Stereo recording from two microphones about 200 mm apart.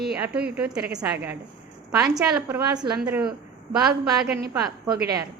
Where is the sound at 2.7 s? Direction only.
20° right (ahead or behind).